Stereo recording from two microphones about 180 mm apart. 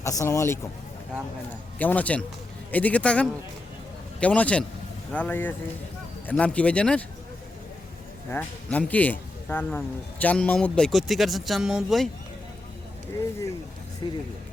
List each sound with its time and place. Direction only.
0.0 s speech: 15° left (ahead or behind)
1.8 s speech: 10° left (ahead or behind)
8.3 s speech: 10° left (ahead or behind)
14.0 s speech: 25° left (ahead or behind)